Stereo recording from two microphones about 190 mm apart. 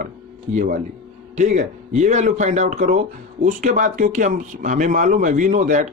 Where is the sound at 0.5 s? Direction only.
40° right (ahead or behind).